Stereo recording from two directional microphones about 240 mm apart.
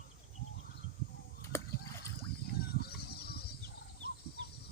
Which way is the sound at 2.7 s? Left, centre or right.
Left.